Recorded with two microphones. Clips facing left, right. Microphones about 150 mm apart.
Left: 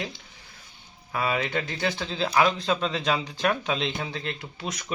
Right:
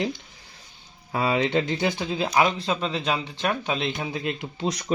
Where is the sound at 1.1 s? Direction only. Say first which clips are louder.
Right 4 dB; 25° right (ahead or behind).